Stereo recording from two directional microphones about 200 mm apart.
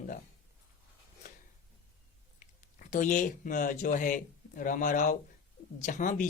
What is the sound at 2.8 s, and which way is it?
Speech, 40° left (ahead or behind).